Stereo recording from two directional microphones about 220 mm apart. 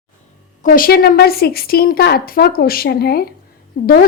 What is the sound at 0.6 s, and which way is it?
A woman's voice, 40° left (ahead or behind).